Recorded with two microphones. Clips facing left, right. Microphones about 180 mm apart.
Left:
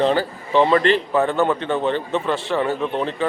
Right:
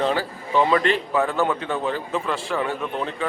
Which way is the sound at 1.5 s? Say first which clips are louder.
Left 4 dB; centre (ahead or behind).